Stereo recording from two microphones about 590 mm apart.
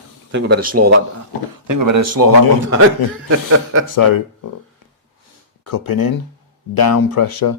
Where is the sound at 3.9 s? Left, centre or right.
Left.